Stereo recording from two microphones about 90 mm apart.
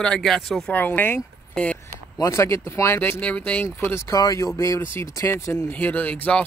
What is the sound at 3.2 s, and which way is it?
Speech, 15° left (ahead or behind).